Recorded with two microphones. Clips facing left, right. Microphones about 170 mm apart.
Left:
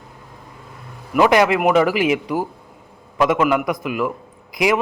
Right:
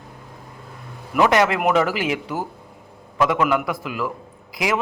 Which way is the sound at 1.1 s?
10° left (ahead or behind).